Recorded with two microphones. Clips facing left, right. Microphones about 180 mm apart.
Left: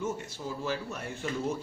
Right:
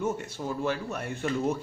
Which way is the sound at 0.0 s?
60° right (ahead or behind).